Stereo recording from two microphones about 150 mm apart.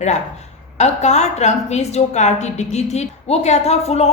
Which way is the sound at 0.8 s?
50° left (ahead or behind).